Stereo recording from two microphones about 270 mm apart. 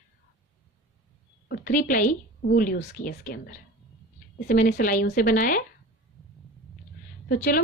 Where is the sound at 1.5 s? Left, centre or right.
Left.